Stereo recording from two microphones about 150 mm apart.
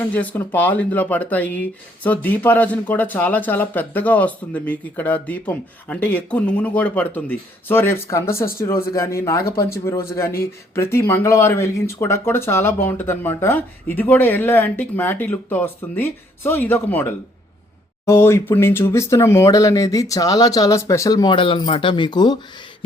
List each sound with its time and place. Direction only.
0.1 s speech: 10° left (ahead or behind); by 22.4 s 30° left (ahead or behind)